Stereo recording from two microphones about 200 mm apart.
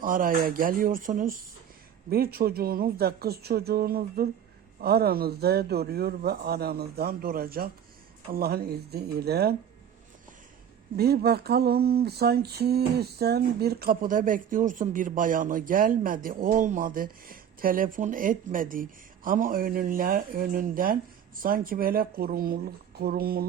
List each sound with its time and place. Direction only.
0.0 s speech: 45° right (ahead or behind)
10.9 s speech: 50° right (ahead or behind)